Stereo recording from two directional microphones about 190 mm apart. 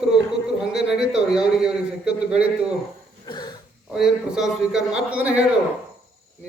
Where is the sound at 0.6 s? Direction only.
5° right (ahead or behind).